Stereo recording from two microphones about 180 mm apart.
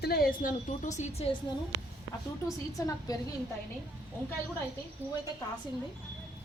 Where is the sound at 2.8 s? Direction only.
15° left (ahead or behind).